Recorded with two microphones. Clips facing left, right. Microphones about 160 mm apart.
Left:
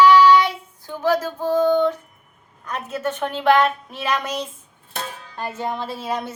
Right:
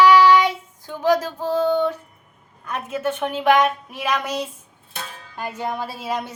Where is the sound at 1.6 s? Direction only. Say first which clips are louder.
Left 2 dB; 10° right (ahead or behind).